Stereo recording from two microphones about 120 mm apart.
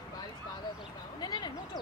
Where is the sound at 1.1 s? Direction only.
35° left (ahead or behind).